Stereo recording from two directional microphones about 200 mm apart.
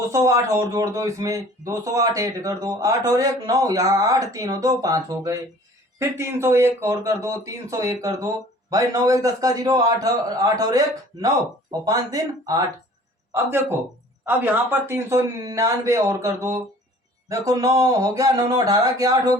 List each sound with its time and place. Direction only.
0.1 s speech: 15° right (ahead or behind)